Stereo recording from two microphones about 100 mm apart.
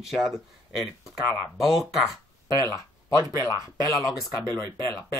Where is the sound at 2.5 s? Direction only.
35° left (ahead or behind).